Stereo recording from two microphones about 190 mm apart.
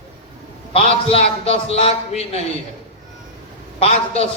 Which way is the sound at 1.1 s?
30° left (ahead or behind).